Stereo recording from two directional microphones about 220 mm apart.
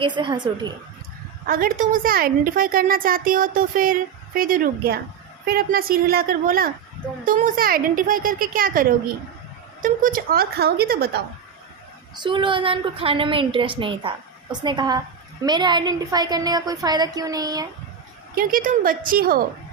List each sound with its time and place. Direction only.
0.2 s a woman's voice: 20° right (ahead or behind)
1.5 s a woman's voice: 40° right (ahead or behind)
12.1 s a woman's voice: 20° right (ahead or behind)
18.3 s a woman's voice: 40° right (ahead or behind)